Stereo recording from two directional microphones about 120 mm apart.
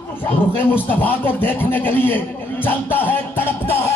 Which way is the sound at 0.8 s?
15° left (ahead or behind).